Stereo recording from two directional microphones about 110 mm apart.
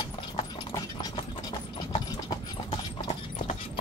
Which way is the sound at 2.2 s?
40° left (ahead or behind).